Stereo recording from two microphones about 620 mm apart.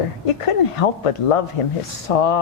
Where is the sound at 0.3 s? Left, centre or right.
Left.